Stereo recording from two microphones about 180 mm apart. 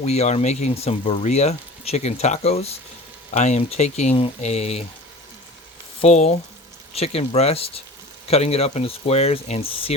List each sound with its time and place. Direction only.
0.0 s speech: 40° left (ahead or behind)
6.0 s speech: 35° left (ahead or behind)